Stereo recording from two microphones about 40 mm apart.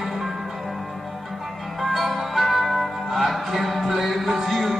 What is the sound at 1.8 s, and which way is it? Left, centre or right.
Music, centre.